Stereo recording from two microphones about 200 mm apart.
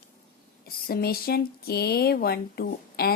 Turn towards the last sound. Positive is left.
turn(degrees=50)  # may be behind; listen again after turning